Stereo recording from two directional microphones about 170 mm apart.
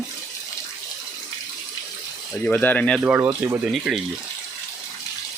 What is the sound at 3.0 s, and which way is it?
Speech, 10° right (ahead or behind).